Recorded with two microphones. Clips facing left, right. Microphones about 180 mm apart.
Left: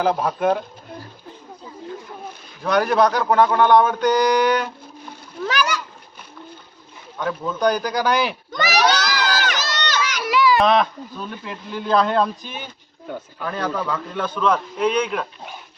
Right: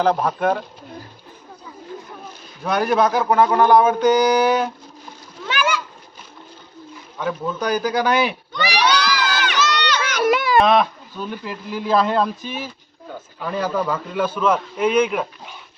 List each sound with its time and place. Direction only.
0.0 s a man's voice: 5° left (ahead or behind)
2.6 s speech: 5° right (ahead or behind)
5.5 s splash: 40° left (ahead or behind)
7.2 s speech: 5° right (ahead or behind)
8.5 s crowd: 40° left (ahead or behind)
10.0 s children playing: 55° right (ahead or behind)
10.6 s speech: centre (ahead or behind)